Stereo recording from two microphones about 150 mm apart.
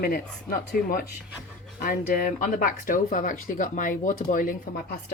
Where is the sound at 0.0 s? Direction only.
85° left.